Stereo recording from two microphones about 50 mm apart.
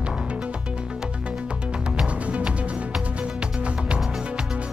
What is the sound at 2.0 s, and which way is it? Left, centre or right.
Music, right.